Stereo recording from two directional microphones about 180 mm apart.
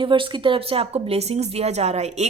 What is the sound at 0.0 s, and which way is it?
A woman's voice, 25° right (ahead or behind).